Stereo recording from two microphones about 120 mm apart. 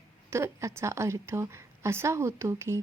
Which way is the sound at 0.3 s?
25° right (ahead or behind).